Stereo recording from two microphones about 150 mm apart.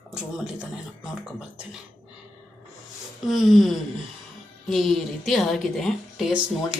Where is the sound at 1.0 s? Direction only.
5° right (ahead or behind).